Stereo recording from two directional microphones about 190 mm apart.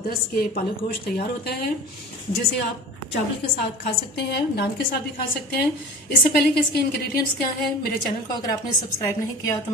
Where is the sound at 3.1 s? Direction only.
60° left (ahead or behind).